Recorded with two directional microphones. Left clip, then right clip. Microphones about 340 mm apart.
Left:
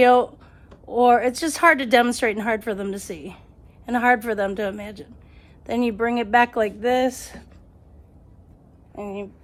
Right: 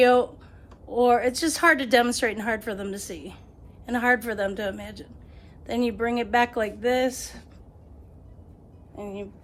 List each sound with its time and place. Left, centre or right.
0.0 s a woman's voice: left
9.0 s a woman's voice: left